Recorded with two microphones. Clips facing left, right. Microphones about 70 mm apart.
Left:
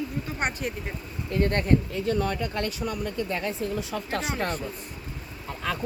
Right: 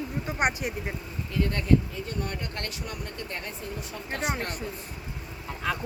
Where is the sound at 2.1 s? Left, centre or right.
Left.